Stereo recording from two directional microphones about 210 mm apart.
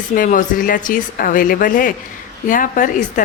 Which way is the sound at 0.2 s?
40° left (ahead or behind).